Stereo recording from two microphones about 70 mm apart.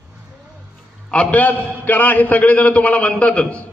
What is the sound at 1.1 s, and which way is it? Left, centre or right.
A man's voice, centre.